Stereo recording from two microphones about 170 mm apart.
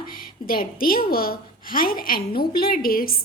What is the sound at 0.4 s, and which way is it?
A woman's voice, 55° left (ahead or behind).